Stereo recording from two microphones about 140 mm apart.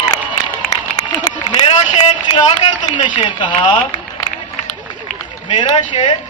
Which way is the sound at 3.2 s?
35° left (ahead or behind).